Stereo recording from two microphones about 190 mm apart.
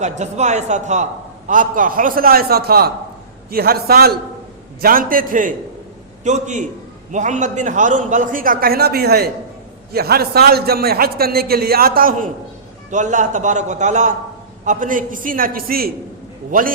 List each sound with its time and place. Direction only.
0.0 s a man's voice: 35° right (ahead or behind)